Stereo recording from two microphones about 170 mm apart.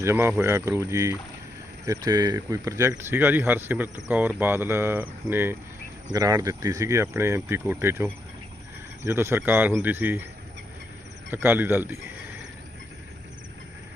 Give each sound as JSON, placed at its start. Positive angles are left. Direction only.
{"t": 0.0, "sound": "speech", "side_deg": -15}
{"t": 11.3, "sound": "speech", "side_deg": -10}